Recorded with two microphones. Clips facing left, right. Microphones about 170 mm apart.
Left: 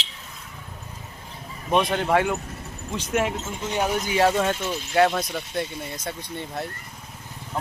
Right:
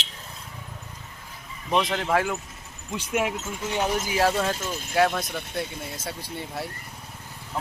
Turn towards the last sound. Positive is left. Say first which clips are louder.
# left 2 dB
turn(degrees=-5)  # may be behind; listen again after turning